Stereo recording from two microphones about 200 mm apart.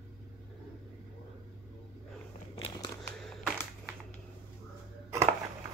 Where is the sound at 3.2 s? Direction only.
Centre (ahead or behind).